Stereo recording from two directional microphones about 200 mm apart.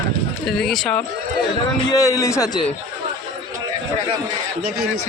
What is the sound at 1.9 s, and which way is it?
Speech, 15° left (ahead or behind).